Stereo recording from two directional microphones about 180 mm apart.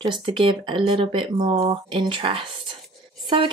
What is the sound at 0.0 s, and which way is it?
Speech, 25° right (ahead or behind).